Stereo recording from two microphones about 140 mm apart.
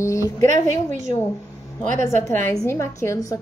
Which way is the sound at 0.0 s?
20° left (ahead or behind).